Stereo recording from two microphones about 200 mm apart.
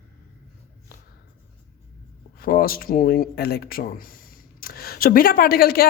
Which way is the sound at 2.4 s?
45° left (ahead or behind).